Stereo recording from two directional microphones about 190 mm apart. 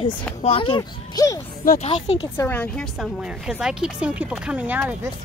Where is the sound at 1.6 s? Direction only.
35° left (ahead or behind).